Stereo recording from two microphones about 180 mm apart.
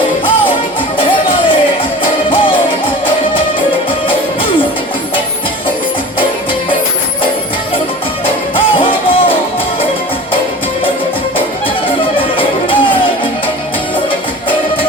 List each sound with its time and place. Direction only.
2.3 s music: 30° left (ahead or behind)
8.5 s music: 30° left (ahead or behind)
11.9 s music: 30° left (ahead or behind)